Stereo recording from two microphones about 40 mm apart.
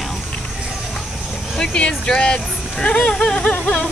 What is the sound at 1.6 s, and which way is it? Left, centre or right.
Speech, left.